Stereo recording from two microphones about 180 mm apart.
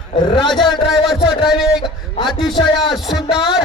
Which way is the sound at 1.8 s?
25° left (ahead or behind).